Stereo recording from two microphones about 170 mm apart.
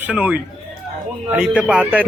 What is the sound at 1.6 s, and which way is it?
Speech, 5° right (ahead or behind).